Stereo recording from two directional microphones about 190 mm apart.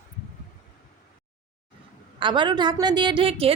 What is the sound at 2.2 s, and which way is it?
A woman's voice, 25° right (ahead or behind).